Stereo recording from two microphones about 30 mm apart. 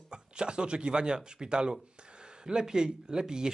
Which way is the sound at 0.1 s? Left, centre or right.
Right.